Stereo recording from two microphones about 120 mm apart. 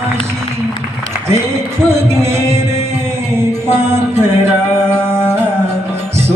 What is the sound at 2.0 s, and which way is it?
Music, 20° right (ahead or behind).